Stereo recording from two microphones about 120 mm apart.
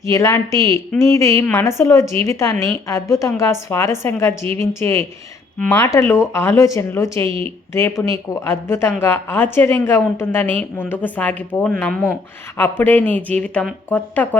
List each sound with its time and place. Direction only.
0.1 s a woman's voice: 25° left (ahead or behind)
7.3 s speech: 50° right (ahead or behind)
7.7 s a woman's voice: 20° left (ahead or behind)